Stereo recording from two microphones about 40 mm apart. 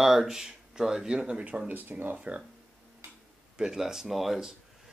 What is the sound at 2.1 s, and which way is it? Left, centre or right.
Speech, right.